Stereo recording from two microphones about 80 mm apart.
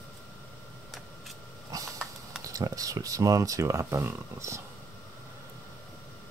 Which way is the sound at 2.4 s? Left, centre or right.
Right.